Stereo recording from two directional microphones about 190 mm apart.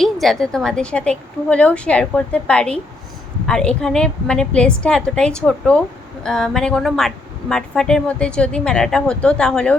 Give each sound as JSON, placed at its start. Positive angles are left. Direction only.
{"t": 0.0, "sound": "a woman's voice", "side_deg": 0}